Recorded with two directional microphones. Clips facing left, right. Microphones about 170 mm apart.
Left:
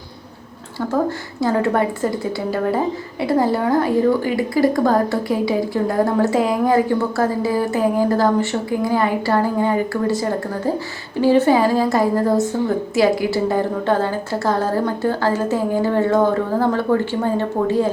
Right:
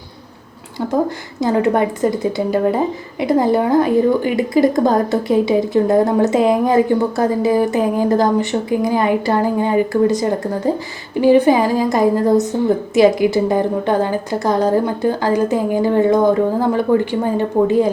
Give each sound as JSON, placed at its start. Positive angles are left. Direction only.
{"t": 1.4, "sound": "a woman's voice", "side_deg": -20}